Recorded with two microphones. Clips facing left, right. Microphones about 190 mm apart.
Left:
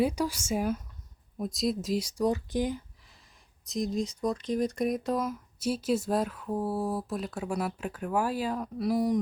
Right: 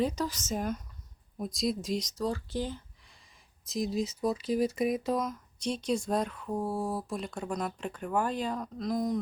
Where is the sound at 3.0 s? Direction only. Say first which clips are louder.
Left 1 dB; centre (ahead or behind).